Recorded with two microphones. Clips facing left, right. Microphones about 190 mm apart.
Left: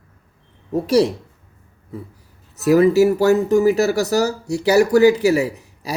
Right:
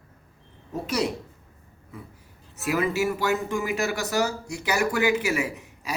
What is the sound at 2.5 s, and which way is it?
Speech, 40° left (ahead or behind).